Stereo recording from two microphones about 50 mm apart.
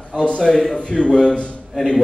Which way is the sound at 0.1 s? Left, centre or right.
Left.